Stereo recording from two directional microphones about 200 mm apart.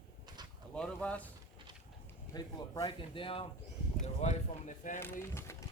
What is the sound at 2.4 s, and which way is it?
Speech, 20° left (ahead or behind).